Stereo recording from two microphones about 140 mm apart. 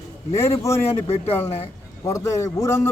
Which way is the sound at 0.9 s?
50° left (ahead or behind).